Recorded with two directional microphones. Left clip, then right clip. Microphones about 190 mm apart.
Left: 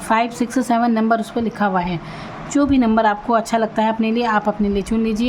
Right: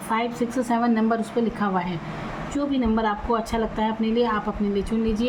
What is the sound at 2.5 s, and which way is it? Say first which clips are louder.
A woman's voice: left 8 dB; 50° left (ahead or behind).